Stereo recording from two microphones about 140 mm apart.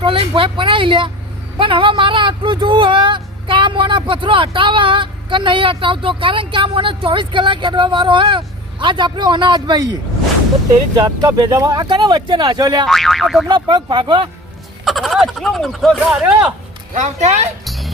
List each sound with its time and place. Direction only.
0.0 s speech: 40° right (ahead or behind)
12.8 s speech: 5° left (ahead or behind)
13.5 s speech: 30° right (ahead or behind)
14.8 s speech: centre (ahead or behind)
16.9 s speech: 55° right (ahead or behind)
17.7 s music: centre (ahead or behind)